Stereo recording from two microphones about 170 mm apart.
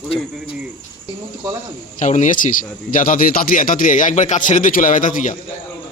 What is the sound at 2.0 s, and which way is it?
A man's voice, 45° left (ahead or behind).